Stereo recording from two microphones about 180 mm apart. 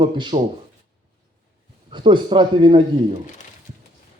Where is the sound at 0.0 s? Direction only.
25° right (ahead or behind).